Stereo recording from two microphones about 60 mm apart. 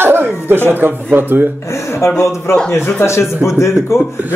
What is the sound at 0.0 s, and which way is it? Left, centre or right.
Chuckle, right.